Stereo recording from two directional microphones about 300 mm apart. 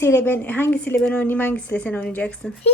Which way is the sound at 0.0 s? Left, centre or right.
Centre.